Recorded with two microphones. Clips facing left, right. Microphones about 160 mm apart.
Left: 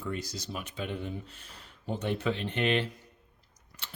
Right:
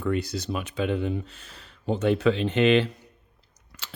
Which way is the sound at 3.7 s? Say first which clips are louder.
Right 4 dB; 90° right.